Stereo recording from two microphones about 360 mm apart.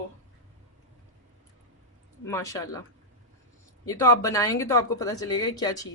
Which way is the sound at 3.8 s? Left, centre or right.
Centre.